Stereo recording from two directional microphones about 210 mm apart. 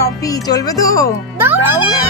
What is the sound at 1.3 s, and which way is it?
Speech, 10° right (ahead or behind).